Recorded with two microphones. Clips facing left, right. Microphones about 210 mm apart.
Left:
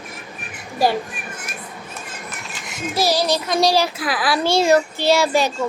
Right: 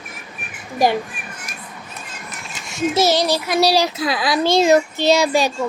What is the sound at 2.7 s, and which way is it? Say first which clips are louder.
Speech: right 4 dB; 25° right (ahead or behind).